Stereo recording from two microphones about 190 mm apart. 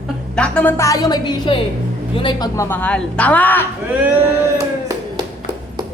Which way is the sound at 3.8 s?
10° right (ahead or behind).